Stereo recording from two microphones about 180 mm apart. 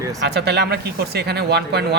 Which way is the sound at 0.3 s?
65° right (ahead or behind).